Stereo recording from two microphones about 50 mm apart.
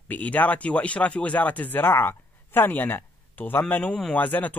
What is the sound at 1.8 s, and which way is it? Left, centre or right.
Speech, left.